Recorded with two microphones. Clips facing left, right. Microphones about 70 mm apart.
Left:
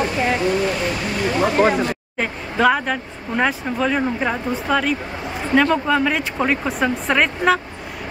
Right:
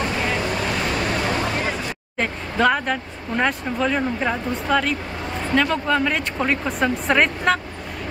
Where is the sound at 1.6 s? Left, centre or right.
Left.